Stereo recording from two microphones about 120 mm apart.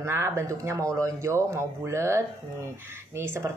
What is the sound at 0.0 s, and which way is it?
Speech, 20° right (ahead or behind).